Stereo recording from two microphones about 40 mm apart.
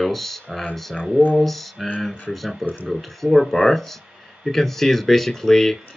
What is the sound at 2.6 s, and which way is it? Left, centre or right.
Speech, left.